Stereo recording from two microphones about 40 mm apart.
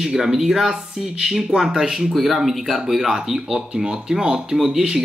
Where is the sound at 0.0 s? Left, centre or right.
Centre.